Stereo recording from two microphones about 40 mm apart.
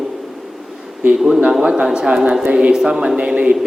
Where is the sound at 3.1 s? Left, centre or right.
Right.